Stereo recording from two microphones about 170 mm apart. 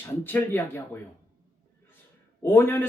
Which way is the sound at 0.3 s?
10° left (ahead or behind).